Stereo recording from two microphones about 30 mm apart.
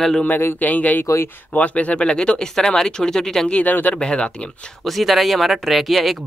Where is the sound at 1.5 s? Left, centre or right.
Left.